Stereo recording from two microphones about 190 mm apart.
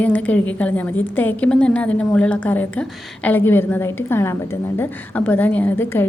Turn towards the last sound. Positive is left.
turn(degrees=10)  # may be behind; listen again after turning